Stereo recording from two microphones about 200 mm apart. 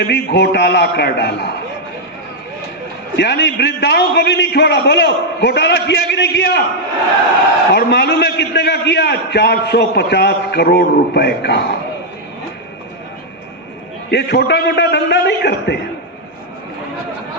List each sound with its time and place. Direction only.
0.0 s a man's voice: 55° left (ahead or behind)
3.2 s a man's voice: 55° left (ahead or behind)
7.7 s a man's voice: 55° left (ahead or behind)
14.1 s a man's voice: 55° left (ahead or behind)